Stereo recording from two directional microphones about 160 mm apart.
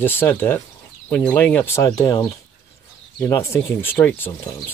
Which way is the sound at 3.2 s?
15° left (ahead or behind).